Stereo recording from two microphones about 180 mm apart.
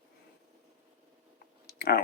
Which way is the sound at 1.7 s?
60° left (ahead or behind).